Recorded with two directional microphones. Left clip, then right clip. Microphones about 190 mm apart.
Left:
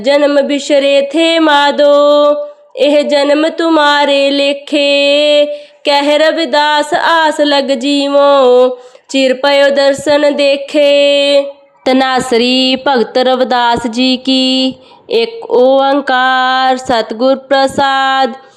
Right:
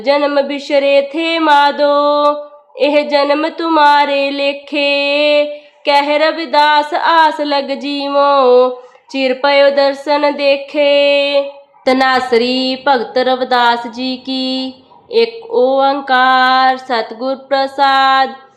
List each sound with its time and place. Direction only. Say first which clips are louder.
0.0 s speech: left 3 dB; 25° left (ahead or behind)
11.9 s speech: left 1 dB; 50° left (ahead or behind)
15.1 s a sound: left 2 dB; 40° left (ahead or behind)